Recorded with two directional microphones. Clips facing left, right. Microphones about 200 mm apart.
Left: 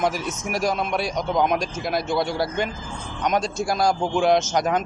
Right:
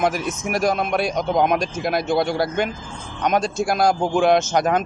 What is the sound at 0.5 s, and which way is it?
A man's voice, 55° right (ahead or behind).